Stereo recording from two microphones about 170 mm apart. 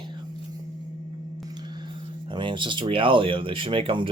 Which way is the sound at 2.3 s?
30° right (ahead or behind).